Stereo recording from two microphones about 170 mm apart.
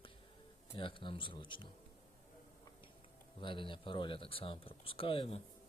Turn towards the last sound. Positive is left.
turn(degrees=35)  # may be behind; listen again after turning